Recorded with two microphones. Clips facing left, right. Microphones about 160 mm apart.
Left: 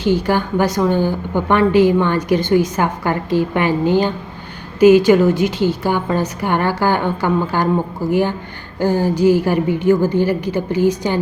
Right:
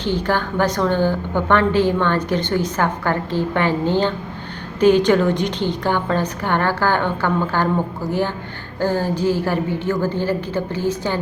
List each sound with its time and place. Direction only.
0.0 s a woman's voice: 10° left (ahead or behind)